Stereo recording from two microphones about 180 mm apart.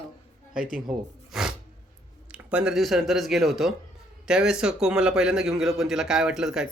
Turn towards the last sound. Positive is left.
turn(degrees=-5)  # may be behind; listen again after turning